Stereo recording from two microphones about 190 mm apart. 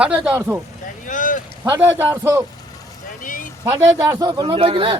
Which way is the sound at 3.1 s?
45° left (ahead or behind).